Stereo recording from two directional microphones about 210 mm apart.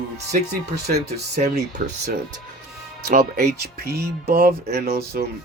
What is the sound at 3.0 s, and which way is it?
Speech, 40° right (ahead or behind).